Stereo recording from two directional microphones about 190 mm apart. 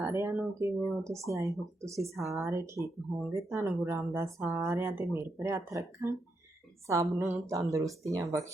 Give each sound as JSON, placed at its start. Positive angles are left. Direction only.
{"t": 0.0, "sound": "speech", "side_deg": -10}